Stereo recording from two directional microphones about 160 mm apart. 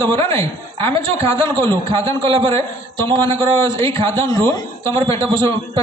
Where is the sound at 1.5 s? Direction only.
30° right (ahead or behind).